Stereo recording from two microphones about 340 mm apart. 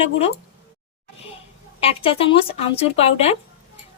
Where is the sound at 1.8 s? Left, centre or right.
Centre.